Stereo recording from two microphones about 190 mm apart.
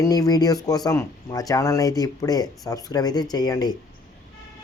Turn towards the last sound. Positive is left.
turn(degrees=20)  # may be behind; listen again after turning